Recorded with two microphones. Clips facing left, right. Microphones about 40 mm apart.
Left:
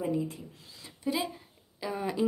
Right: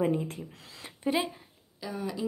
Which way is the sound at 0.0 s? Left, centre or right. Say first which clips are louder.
Right 3 dB; right.